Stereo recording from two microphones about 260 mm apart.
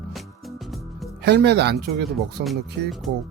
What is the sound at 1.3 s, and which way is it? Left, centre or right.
Speech, right.